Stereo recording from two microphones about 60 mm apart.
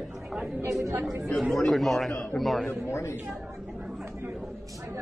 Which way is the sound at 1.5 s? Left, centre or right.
Centre.